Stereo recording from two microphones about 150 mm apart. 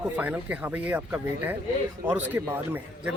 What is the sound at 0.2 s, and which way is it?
Speech, 10° right (ahead or behind).